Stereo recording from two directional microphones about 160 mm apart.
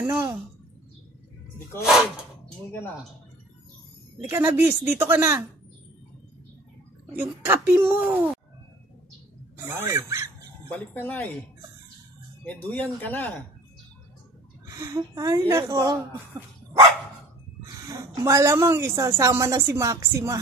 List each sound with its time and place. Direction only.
0.0 s speech: 15° right (ahead or behind)
4.2 s speech: 15° right (ahead or behind)
7.1 s speech: 10° right (ahead or behind)
9.7 s speech: 15° right (ahead or behind)
10.8 s speech: 10° left (ahead or behind)
12.4 s speech: 10° left (ahead or behind)
14.7 s a woman's voice: 20° right (ahead or behind)
17.6 s a woman's voice: 20° right (ahead or behind)